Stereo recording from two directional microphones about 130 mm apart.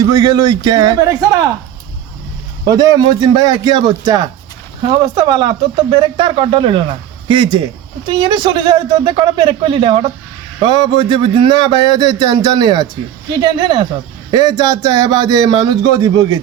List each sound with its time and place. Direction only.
0.1 s a man's voice: 30° right (ahead or behind)
2.6 s a man's voice: 30° right (ahead or behind)